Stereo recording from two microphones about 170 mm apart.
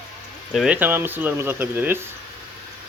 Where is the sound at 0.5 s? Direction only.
5° right (ahead or behind).